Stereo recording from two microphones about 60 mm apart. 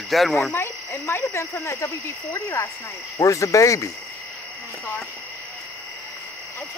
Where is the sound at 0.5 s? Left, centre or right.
Left.